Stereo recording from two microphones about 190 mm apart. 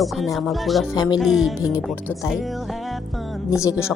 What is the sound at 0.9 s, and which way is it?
Speech, 20° left (ahead or behind).